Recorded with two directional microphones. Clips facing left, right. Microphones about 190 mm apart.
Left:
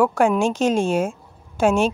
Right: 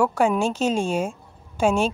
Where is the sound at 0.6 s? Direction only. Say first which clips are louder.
Left 3 dB; 10° left (ahead or behind).